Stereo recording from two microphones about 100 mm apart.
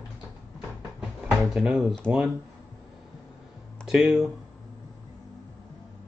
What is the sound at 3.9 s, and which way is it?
Speech, 5° right (ahead or behind).